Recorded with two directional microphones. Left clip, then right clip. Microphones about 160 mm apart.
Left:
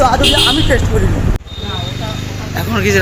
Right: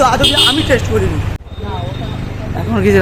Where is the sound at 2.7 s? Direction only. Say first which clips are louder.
Right 2 dB; 25° right (ahead or behind).